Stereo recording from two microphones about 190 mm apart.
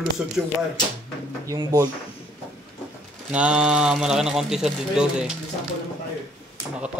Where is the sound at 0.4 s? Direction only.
5° right (ahead or behind).